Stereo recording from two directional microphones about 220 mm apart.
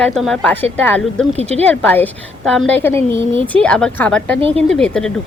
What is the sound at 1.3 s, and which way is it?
Speech, 30° right (ahead or behind).